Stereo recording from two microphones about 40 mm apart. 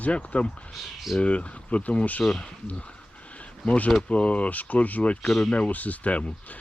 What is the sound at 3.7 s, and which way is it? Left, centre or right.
Speech, left.